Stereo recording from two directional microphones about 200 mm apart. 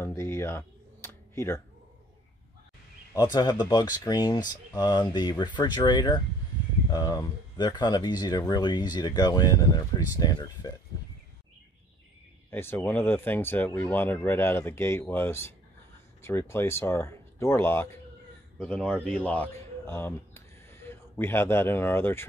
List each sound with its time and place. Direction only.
0.0 s computer keyboard: 15° left (ahead or behind)
3.3 s speech: 20° left (ahead or behind)
12.4 s speech: 10° left (ahead or behind)